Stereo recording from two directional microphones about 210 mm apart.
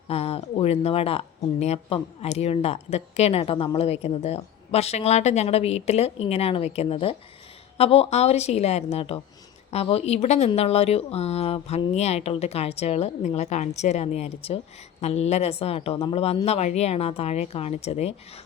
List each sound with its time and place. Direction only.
0.1 s speech: 30° left (ahead or behind)